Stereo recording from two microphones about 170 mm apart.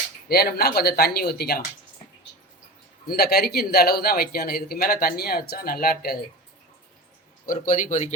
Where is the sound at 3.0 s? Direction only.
65° left (ahead or behind).